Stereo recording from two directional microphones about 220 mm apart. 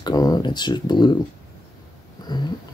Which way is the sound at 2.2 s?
20° left (ahead or behind).